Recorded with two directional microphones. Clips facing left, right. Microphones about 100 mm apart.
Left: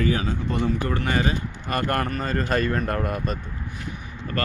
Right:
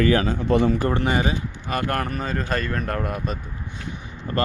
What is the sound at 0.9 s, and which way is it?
Speech, 20° right (ahead or behind).